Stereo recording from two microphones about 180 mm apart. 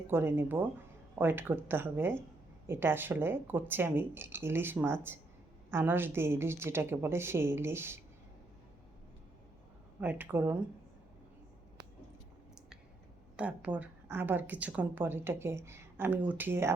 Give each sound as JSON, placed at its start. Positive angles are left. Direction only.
{"t": 0.1, "sound": "a woman's voice", "side_deg": -15}
{"t": 10.0, "sound": "a woman's voice", "side_deg": -10}
{"t": 13.3, "sound": "a woman's voice", "side_deg": -5}